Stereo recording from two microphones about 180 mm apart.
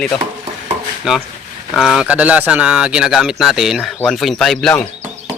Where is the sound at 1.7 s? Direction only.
Centre (ahead or behind).